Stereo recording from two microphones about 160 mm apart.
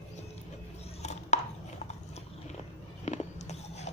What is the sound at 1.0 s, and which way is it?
Chopping, 45° left (ahead or behind).